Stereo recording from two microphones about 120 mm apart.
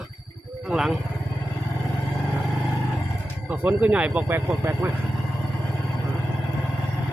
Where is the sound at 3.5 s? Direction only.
15° right (ahead or behind).